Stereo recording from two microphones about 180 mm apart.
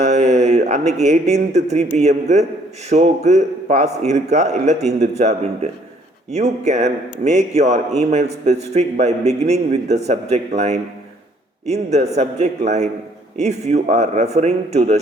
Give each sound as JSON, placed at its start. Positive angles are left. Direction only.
{"t": 0.0, "sound": "a man's voice", "side_deg": -40}
{"t": 6.3, "sound": "a man's voice", "side_deg": -40}